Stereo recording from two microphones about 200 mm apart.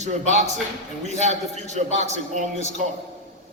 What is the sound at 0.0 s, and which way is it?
A man's voice, 35° right (ahead or behind).